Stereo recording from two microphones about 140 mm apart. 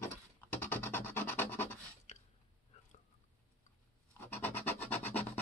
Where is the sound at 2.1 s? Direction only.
55° left (ahead or behind).